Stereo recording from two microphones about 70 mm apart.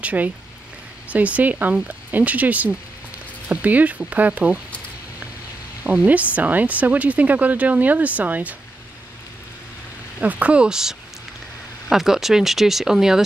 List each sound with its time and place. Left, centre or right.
0.0 s speech: right
5.9 s speech: right
10.2 s speech: centre